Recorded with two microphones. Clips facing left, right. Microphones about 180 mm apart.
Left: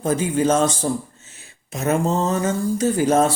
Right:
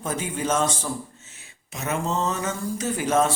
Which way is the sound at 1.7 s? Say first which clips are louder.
Left 6 dB; 45° left (ahead or behind).